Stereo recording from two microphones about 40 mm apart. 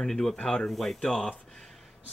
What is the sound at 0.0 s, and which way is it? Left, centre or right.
Speech, centre.